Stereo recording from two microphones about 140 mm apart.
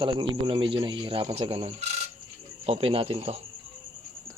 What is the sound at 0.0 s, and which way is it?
Speech, 35° right (ahead or behind).